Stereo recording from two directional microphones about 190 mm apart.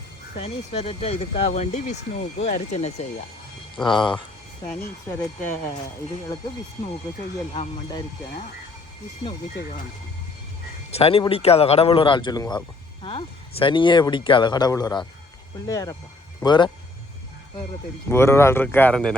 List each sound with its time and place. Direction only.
0.3 s speech: 30° left (ahead or behind)
3.8 s speech: 25° left (ahead or behind)
10.9 s speech: 30° left (ahead or behind)
18.1 s speech: 15° left (ahead or behind)